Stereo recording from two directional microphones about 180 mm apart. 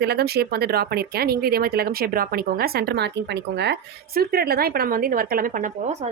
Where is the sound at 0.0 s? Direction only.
65° right (ahead or behind).